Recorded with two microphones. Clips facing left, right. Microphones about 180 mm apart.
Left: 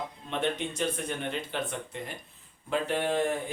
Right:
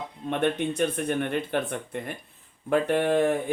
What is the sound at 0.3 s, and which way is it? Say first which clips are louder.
Speech: right 6 dB; 55° right (ahead or behind).